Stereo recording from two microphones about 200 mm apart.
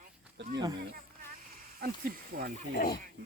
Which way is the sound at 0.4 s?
65° right (ahead or behind).